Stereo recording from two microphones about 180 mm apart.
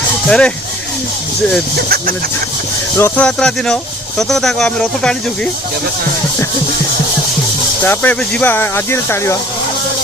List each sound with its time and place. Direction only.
0.3 s speech: 5° left (ahead or behind)
1.7 s speech: 60° right (ahead or behind)
3.0 s speech: 5° left (ahead or behind)
7.9 s speech: 5° left (ahead or behind)